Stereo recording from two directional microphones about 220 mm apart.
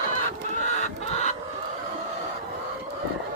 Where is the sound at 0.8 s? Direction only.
30° left (ahead or behind).